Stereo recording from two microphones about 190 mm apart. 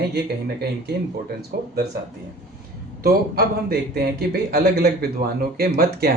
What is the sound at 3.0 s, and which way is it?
A man's voice, 55° right (ahead or behind).